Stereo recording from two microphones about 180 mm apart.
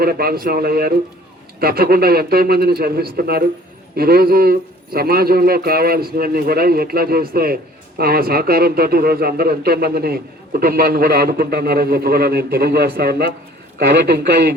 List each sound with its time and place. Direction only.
0.0 s a man's voice: 55° right (ahead or behind)